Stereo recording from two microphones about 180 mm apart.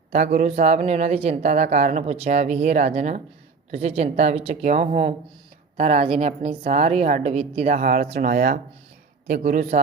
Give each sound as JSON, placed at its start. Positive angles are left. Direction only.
{"t": 0.1, "sound": "speech", "side_deg": -45}
{"t": 8.0, "sound": "speech", "side_deg": -35}
{"t": 8.3, "sound": "speech", "side_deg": -60}
{"t": 9.4, "sound": "speech", "side_deg": -40}